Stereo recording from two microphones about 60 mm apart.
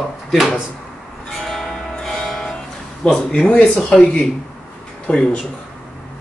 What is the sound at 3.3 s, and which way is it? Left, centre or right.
Speech, centre.